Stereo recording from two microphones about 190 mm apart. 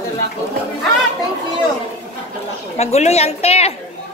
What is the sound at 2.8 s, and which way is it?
Speech, 35° left (ahead or behind).